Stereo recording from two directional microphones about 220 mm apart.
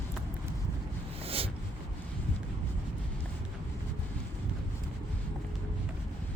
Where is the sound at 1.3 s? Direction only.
25° right (ahead or behind).